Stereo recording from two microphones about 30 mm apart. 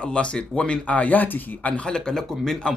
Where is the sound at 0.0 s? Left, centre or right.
Left.